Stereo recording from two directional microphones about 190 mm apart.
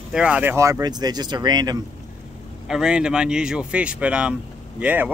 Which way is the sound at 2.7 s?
5° right (ahead or behind).